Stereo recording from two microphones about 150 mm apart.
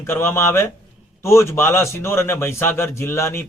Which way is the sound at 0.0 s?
15° left (ahead or behind).